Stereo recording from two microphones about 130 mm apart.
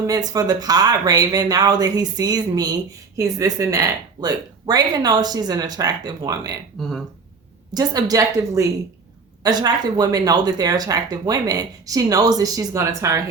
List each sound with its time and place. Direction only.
0.1 s speech: 30° right (ahead or behind)
7.7 s speech: 30° right (ahead or behind)